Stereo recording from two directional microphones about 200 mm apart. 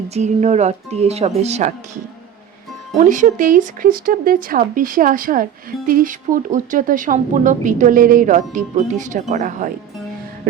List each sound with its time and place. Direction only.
0.1 s speech: 35° right (ahead or behind)
3.0 s speech: 40° right (ahead or behind)
10.5 s music: 45° right (ahead or behind)